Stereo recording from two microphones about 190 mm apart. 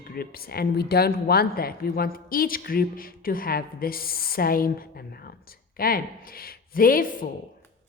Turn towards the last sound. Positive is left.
turn(degrees=45)  # may be behind; listen again after turning